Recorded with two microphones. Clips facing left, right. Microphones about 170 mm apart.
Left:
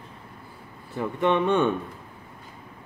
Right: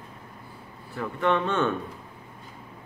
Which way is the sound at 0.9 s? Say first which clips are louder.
Left 2 dB; 20° left (ahead or behind).